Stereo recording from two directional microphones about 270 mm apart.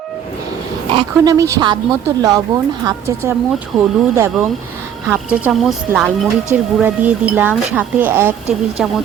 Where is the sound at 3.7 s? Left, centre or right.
Centre.